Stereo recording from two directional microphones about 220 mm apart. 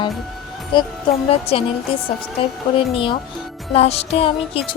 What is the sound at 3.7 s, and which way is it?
Speech, 30° left (ahead or behind).